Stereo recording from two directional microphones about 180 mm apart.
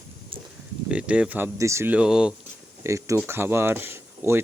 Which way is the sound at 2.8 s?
15° right (ahead or behind).